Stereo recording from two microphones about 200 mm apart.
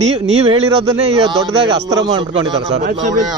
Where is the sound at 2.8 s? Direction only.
40° right (ahead or behind).